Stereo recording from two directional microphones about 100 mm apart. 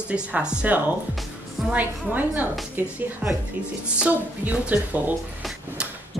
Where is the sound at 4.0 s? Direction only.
15° right (ahead or behind).